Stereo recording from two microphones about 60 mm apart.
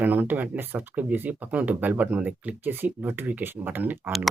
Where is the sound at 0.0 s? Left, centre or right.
Right.